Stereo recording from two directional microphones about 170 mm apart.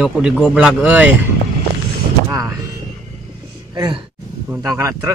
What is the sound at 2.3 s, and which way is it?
Vehicle, 20° right (ahead or behind).